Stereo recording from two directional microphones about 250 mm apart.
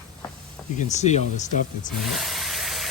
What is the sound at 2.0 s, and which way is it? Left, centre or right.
Vehicle, centre.